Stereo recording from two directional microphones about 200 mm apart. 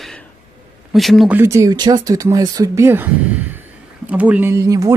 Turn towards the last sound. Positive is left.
turn(degrees=-15)  # may be behind; listen again after turning